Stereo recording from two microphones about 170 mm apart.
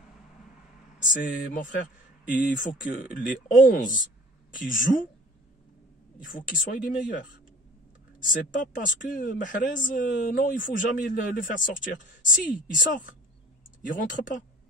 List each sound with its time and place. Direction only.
0.9 s speech: 50° left (ahead or behind)
6.2 s speech: 55° left (ahead or behind)
8.3 s speech: 55° left (ahead or behind)